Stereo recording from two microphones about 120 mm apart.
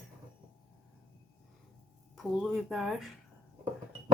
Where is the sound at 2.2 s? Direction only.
Centre (ahead or behind).